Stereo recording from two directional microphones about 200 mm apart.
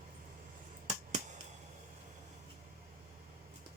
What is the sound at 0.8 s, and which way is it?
Finger snapping, 35° right (ahead or behind).